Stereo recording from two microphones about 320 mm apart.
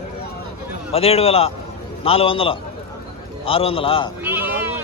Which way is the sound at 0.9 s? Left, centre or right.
Centre.